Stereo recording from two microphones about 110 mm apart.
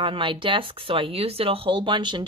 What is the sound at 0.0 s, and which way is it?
Speech, 50° right (ahead or behind).